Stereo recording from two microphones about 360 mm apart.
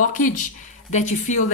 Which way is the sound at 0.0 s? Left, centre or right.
Left.